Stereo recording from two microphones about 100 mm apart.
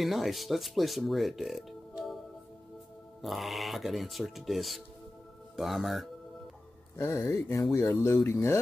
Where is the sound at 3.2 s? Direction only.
Centre (ahead or behind).